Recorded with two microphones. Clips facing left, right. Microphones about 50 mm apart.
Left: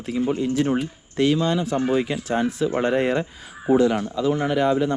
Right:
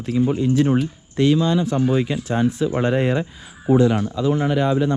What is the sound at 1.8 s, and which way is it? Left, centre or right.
Speech, left.